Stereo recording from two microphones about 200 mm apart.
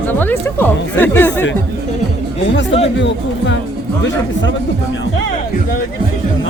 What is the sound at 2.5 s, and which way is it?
Speech, 65° left (ahead or behind).